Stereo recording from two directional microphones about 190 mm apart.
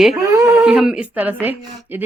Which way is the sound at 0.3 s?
15° right (ahead or behind).